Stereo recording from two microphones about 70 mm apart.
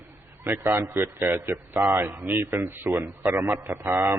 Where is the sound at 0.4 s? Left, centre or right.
Right.